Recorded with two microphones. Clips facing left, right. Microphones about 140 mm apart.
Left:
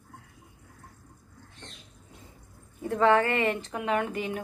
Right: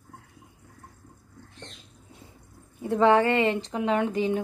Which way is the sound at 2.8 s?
20° right (ahead or behind).